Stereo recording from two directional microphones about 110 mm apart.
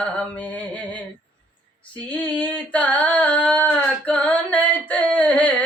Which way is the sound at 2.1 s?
15° left (ahead or behind).